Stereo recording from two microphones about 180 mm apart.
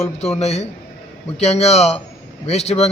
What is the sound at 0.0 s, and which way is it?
A man's voice, 35° left (ahead or behind).